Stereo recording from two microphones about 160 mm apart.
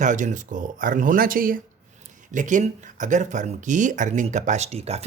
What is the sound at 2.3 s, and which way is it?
Speech, 50° right (ahead or behind).